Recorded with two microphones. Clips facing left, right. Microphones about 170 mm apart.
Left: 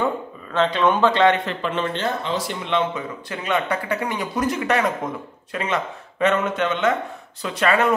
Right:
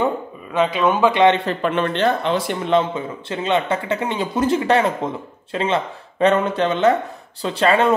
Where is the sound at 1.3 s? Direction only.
35° right (ahead or behind).